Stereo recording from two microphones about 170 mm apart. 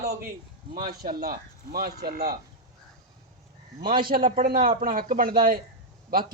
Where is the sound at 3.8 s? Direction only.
60° right (ahead or behind).